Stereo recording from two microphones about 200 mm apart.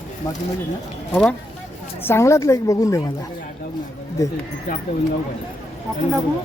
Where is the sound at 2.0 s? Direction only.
10° left (ahead or behind).